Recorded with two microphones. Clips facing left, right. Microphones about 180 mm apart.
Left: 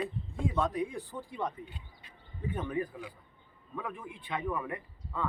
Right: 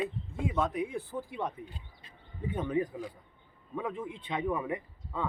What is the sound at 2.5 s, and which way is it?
Speech, 15° right (ahead or behind).